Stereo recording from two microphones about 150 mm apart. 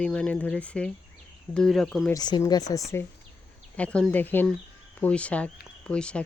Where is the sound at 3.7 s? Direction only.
10° left (ahead or behind).